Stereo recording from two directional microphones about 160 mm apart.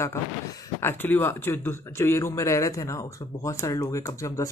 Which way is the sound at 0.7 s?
15° left (ahead or behind).